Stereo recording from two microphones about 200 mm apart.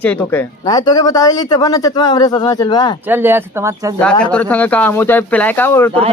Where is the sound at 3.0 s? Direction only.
10° right (ahead or behind).